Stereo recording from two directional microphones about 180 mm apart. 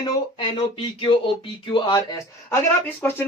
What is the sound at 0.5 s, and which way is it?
A man's voice, 30° left (ahead or behind).